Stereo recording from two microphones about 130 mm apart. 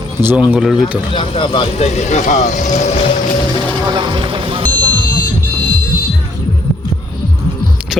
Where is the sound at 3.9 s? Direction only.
40° right (ahead or behind).